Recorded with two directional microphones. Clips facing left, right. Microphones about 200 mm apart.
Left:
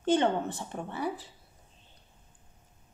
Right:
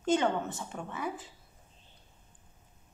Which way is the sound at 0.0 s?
30° left (ahead or behind).